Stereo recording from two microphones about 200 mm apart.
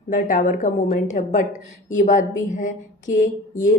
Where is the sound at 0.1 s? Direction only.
40° left (ahead or behind).